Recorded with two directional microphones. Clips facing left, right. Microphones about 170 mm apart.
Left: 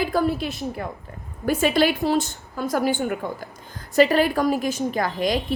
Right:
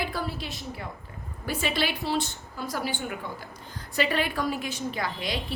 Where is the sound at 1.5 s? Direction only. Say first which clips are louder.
Left 9 dB; 45° left (ahead or behind).